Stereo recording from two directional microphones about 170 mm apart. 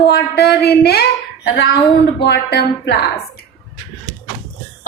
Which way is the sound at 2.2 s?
85° left.